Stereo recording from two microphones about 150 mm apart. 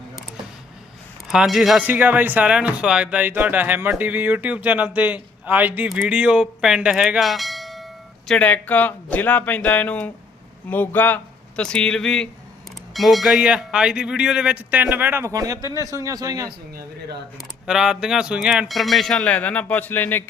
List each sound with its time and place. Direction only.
1.3 s a man's voice: 5° right (ahead or behind); by 16.5 s 25° right (ahead or behind)
16.5 s speech: 90° right
17.7 s speech: 5° right (ahead or behind); by 20.2 s 15° left (ahead or behind)